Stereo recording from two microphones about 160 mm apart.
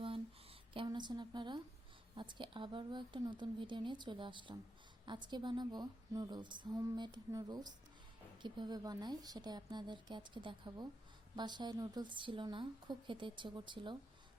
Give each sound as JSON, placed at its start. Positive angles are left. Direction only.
{"t": 0.9, "sound": "a woman's voice", "side_deg": -25}